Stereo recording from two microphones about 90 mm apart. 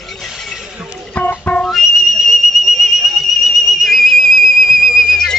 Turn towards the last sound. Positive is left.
turn(degrees=5)  # may be behind; listen again after turning